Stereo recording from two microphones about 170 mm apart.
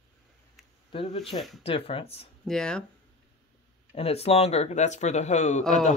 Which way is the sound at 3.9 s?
35° left (ahead or behind).